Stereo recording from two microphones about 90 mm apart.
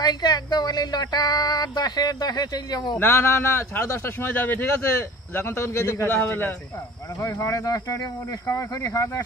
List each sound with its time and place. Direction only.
0.0 s speech: 50° left (ahead or behind)
3.0 s speech: 25° left (ahead or behind)